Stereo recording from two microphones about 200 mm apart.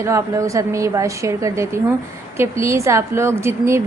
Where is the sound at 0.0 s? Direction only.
15° right (ahead or behind).